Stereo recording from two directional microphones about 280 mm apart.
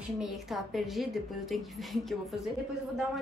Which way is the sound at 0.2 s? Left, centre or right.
Centre.